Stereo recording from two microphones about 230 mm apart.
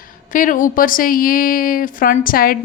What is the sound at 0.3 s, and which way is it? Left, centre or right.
A woman's voice, left.